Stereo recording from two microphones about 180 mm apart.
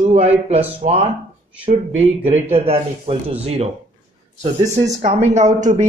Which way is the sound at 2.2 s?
10° right (ahead or behind).